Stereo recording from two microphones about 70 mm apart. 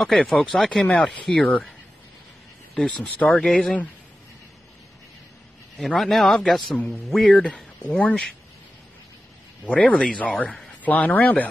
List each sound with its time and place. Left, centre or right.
0.0 s a man's voice: centre
3.2 s a man's voice: centre
3.4 s a man's voice: centre
5.8 s a man's voice: centre
7.3 s speech: centre
9.7 s a man's voice: centre